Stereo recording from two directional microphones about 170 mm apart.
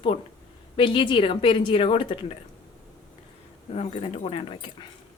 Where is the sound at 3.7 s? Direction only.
40° left (ahead or behind).